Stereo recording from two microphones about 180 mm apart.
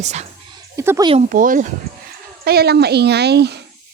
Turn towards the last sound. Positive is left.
turn(degrees=-65)  # may be behind; listen again after turning